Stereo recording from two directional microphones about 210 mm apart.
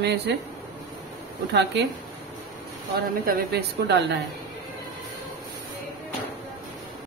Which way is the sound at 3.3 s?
50° right (ahead or behind).